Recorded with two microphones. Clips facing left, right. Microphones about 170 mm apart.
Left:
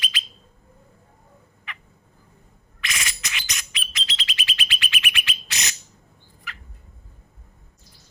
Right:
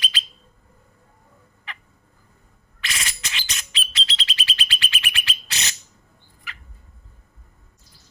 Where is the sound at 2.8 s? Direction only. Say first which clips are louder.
Even; 30° right (ahead or behind).